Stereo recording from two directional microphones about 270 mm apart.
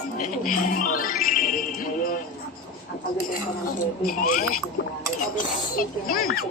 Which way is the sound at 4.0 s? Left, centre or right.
Left.